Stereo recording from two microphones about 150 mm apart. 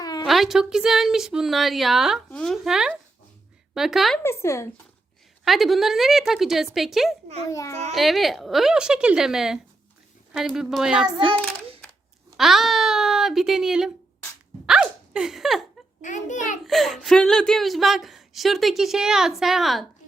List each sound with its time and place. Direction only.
0.0 s a sound: 25° left (ahead or behind)
0.3 s speech: centre (ahead or behind)
4.2 s speech: 20° left (ahead or behind)
5.5 s speech: centre (ahead or behind)
7.5 s speech: 20° left (ahead or behind)
7.9 s speech: centre (ahead or behind)
12.4 s speech: centre (ahead or behind)
14.7 s hiccup: 5° right (ahead or behind)
16.0 s a child's voice: 55° left (ahead or behind)
16.6 s speech: centre (ahead or behind)